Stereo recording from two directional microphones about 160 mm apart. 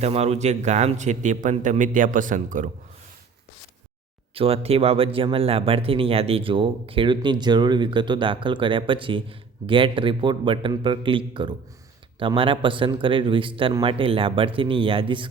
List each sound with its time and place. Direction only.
0.0 s a man's voice: 40° right (ahead or behind)
4.4 s speech: 35° right (ahead or behind)